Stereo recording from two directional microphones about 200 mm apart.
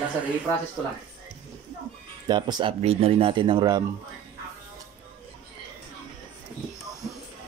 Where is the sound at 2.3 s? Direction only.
20° right (ahead or behind).